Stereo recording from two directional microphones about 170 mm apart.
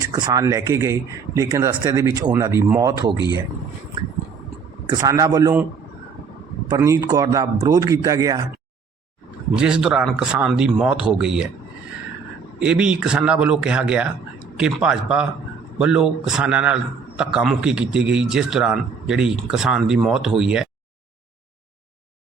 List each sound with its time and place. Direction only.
0.1 s speech: 20° right (ahead or behind)
4.9 s speech: 20° right (ahead or behind)
6.7 s speech: 20° right (ahead or behind)
9.6 s a man's voice: 5° right (ahead or behind)
12.5 s a man's voice: 5° right (ahead or behind)